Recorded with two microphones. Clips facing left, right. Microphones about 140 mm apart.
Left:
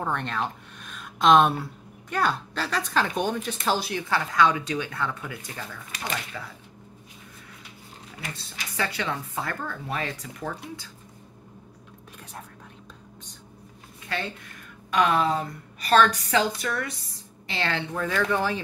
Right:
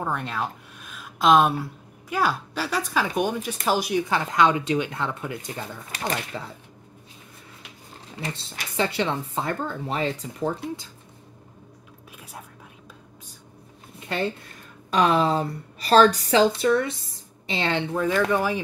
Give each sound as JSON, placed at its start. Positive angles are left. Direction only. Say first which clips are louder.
{"t": 0.0, "sound": "speech", "louder": "even", "side_deg": -5}
{"t": 8.2, "sound": "speech", "louder": "right 5 dB", "side_deg": -25}
{"t": 14.9, "sound": "a woman's voice", "louder": "right 2 dB", "side_deg": -30}